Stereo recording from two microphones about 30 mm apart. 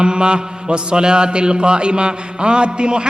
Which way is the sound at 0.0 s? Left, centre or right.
Right.